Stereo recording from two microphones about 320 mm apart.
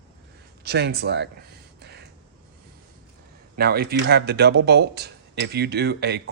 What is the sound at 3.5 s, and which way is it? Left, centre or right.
Speech, right.